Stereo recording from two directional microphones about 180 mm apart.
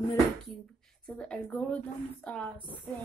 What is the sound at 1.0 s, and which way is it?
A woman's voice, 5° left (ahead or behind).